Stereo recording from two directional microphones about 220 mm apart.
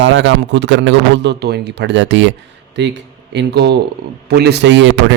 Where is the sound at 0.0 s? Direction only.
55° right (ahead or behind).